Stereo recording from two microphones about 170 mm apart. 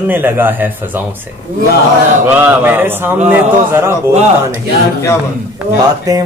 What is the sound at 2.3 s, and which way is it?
Speech, 10° right (ahead or behind).